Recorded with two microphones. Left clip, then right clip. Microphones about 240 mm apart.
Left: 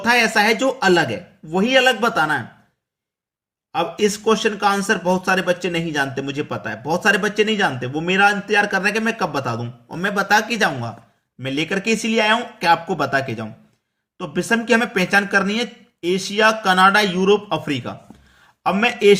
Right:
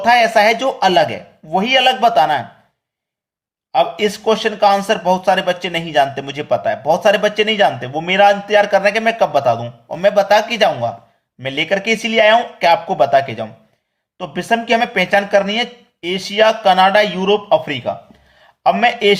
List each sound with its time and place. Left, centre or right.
0.0 s speech: centre
3.7 s speech: centre
14.5 s speech: centre